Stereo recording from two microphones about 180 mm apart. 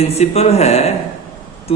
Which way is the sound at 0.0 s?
35° left (ahead or behind).